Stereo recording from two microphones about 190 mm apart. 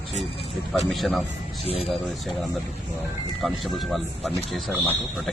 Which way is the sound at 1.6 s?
30° left (ahead or behind).